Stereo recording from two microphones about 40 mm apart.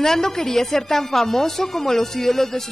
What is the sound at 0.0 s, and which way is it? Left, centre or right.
A woman's voice, centre.